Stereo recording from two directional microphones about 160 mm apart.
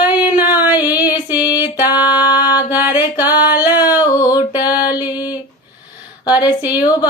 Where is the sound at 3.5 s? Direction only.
10° right (ahead or behind).